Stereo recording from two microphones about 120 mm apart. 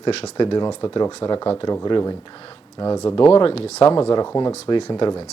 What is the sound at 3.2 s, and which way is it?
Speech, 50° left (ahead or behind).